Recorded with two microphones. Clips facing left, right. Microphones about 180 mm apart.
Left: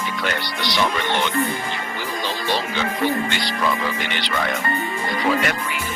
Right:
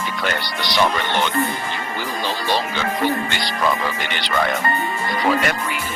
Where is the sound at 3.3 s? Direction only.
40° right (ahead or behind).